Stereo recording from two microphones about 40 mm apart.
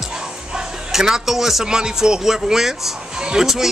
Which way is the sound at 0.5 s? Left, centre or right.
Centre.